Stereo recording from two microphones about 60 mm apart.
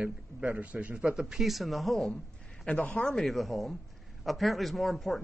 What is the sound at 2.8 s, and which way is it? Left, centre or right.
Speech, left.